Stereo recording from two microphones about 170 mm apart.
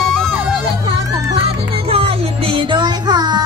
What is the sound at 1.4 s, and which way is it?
Music, 35° right (ahead or behind).